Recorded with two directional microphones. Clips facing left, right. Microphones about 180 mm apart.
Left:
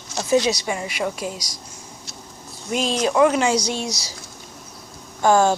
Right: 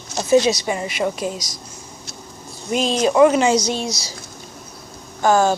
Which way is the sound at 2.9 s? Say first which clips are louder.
Right 4 dB; 15° right (ahead or behind).